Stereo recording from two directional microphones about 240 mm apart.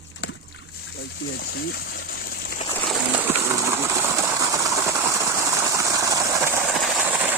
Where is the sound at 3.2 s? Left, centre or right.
Centre.